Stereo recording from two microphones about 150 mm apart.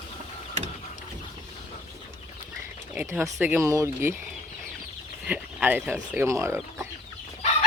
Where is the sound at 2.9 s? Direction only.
15° right (ahead or behind).